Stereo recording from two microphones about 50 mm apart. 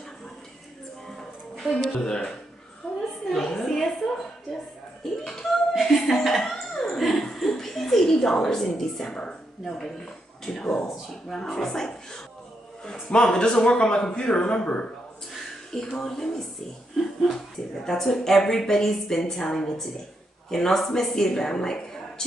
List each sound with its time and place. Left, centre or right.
1.0 s music: centre
1.9 s speech: centre
2.8 s a sound: centre
5.2 s a sound: centre
9.7 s speech: centre
17.0 s speech: centre
17.3 s speech: centre